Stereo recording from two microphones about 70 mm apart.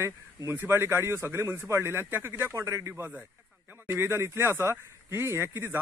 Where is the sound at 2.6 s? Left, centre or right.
Right.